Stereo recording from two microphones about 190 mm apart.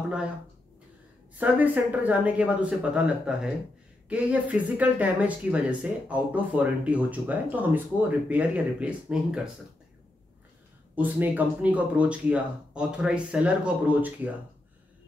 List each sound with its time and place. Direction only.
1.4 s speech: 10° right (ahead or behind)
11.0 s speech: 10° right (ahead or behind)